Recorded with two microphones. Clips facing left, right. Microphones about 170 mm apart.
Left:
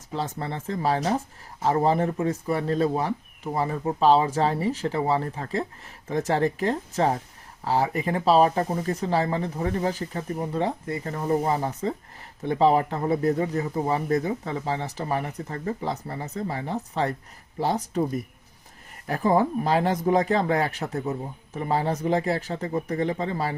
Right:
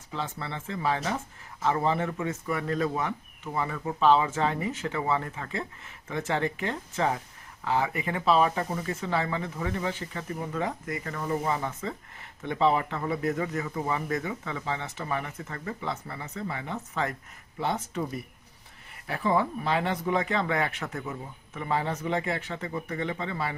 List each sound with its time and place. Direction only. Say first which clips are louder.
0.1 s speech: left 5 dB; 40° left (ahead or behind)